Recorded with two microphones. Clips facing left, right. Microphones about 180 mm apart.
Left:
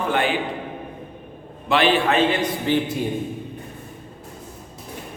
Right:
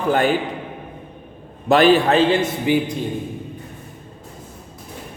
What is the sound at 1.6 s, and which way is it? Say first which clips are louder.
Speech: right 5 dB; 40° right (ahead or behind).